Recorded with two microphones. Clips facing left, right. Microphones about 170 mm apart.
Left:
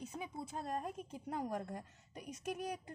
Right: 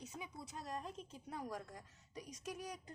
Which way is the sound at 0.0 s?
55° left (ahead or behind).